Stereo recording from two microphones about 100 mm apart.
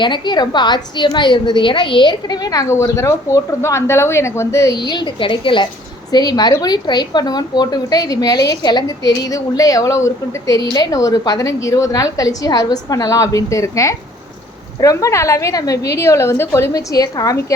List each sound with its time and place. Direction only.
0.0 s a woman's voice: 50° left (ahead or behind); by 4.7 s 30° left (ahead or behind)
4.9 s a woman's voice: 50° left (ahead or behind)
6.1 s a woman's voice: 45° left (ahead or behind)